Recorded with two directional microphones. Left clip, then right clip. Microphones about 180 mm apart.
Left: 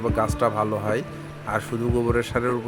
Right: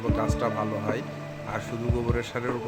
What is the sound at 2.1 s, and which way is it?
Speech, 30° left (ahead or behind).